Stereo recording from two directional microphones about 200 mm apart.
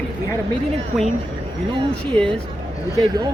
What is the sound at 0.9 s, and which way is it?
Speech, centre (ahead or behind).